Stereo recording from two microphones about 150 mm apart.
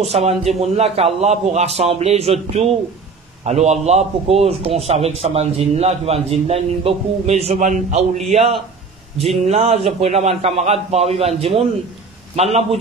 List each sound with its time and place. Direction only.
0.0 s a man's voice: 45° right (ahead or behind)